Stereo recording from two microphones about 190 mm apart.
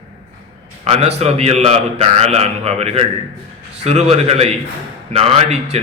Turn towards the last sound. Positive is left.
turn(degrees=-35)  # may be behind; listen again after turning